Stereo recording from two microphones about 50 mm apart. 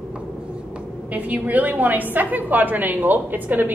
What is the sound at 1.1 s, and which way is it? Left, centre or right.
A woman's voice, right.